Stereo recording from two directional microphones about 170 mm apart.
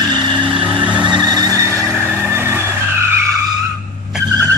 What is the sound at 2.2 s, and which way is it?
Vehicle, 15° right (ahead or behind).